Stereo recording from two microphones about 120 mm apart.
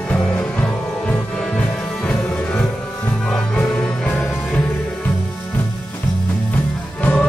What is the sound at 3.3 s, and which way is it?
Music, 10° left (ahead or behind).